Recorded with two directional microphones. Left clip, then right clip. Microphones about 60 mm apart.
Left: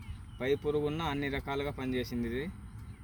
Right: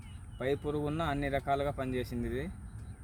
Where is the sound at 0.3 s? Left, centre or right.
Right.